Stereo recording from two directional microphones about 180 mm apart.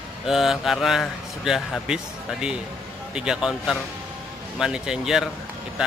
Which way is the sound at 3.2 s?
5° right (ahead or behind).